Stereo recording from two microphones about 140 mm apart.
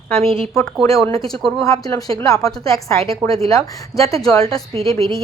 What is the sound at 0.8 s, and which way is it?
Speech, 20° left (ahead or behind).